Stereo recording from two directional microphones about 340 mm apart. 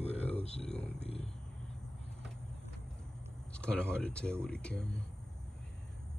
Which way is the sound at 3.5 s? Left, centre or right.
Centre.